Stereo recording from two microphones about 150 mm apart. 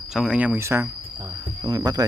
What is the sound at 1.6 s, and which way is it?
Cricket, 25° right (ahead or behind).